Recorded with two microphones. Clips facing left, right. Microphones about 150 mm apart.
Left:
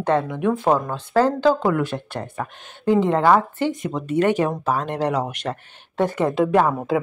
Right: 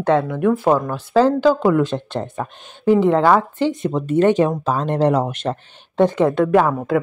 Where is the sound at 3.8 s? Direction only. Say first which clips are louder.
Right 5 dB; 35° right (ahead or behind).